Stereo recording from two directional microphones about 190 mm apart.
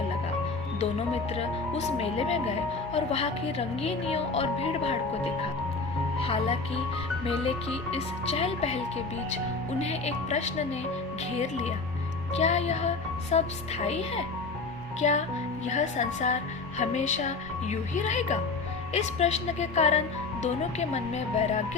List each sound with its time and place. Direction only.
0.8 s a woman's voice: 35° left (ahead or behind)
7.9 s a woman's voice: 30° left (ahead or behind)
9.8 s a woman's voice: 35° left (ahead or behind)